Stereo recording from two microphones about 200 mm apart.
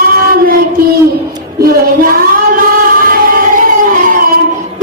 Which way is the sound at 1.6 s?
45° right (ahead or behind).